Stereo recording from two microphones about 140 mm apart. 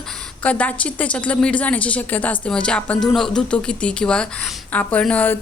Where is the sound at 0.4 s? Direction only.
10° left (ahead or behind).